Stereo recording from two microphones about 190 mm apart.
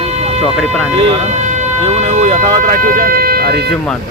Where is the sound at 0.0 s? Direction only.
35° right (ahead or behind).